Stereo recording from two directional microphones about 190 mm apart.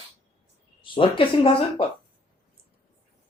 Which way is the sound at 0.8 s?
25° left (ahead or behind).